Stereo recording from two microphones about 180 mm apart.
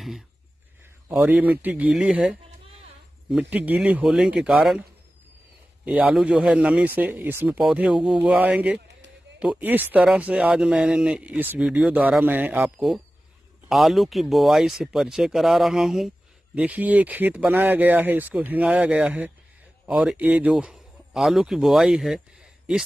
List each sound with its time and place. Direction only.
1.0 s speech: 10° right (ahead or behind)
5.9 s speech: 5° right (ahead or behind)
8.7 s a sound: 75° right (ahead or behind)
9.4 s speech: 10° right (ahead or behind)